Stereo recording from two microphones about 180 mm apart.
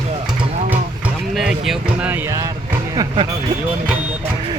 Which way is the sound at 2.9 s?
25° right (ahead or behind).